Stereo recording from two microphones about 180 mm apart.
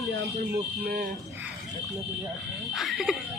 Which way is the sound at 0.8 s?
50° right (ahead or behind).